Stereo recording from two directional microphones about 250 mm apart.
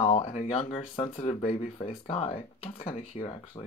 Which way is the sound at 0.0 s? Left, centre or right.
Left.